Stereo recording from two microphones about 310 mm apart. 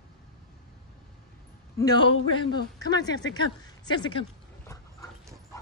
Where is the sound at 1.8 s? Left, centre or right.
Centre.